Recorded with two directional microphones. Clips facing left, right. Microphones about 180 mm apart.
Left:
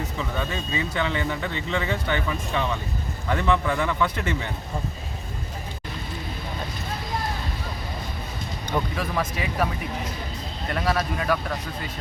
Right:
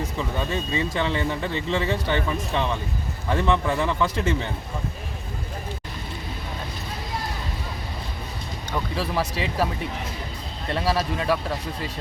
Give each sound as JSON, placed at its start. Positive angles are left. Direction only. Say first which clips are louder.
{"t": 0.3, "sound": "speech", "louder": "right 3 dB", "side_deg": -25}
{"t": 3.3, "sound": "speech", "louder": "right 1 dB", "side_deg": -25}
{"t": 9.0, "sound": "speech", "louder": "right 1 dB", "side_deg": -30}
{"t": 10.7, "sound": "speech", "louder": "right 1 dB", "side_deg": -30}